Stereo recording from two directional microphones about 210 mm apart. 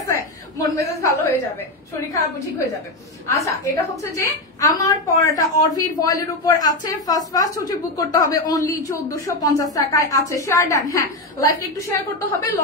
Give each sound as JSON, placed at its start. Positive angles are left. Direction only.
{"t": 0.6, "sound": "a woman's voice", "side_deg": 15}
{"t": 3.3, "sound": "a woman's voice", "side_deg": 15}